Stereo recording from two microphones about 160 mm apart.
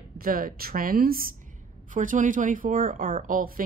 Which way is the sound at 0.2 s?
65° right (ahead or behind).